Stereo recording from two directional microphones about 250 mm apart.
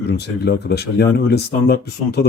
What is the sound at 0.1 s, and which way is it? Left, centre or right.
Speech, left.